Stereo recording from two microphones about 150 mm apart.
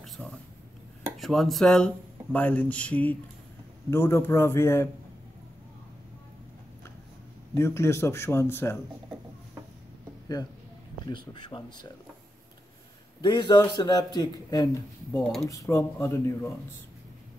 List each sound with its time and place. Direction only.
0.0 s a sound: 5° left (ahead or behind)
1.1 s speech: centre (ahead or behind); by 4.8 s 15° left (ahead or behind)
7.5 s speech: 20° left (ahead or behind)
11.1 s speech: 30° left (ahead or behind)
13.2 s a man's voice: 30° left (ahead or behind)